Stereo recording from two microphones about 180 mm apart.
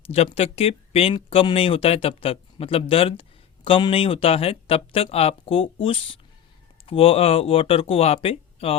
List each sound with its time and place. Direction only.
0.1 s speech: 35° left (ahead or behind)